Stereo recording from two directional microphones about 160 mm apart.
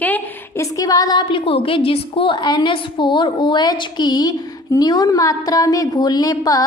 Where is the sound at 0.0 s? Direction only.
15° left (ahead or behind).